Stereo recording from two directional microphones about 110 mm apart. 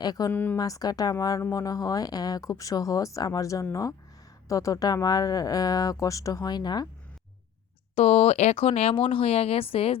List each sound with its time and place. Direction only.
0.0 s speech: 40° left (ahead or behind)
0.3 s a woman's voice: 15° left (ahead or behind)
0.5 s speech: 35° left (ahead or behind)
7.9 s speech: 70° left (ahead or behind)